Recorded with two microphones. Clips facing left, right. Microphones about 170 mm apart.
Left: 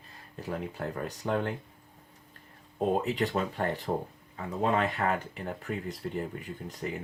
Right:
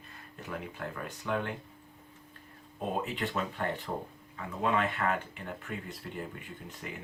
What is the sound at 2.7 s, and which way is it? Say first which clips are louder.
Speech: left 7 dB; 40° left (ahead or behind).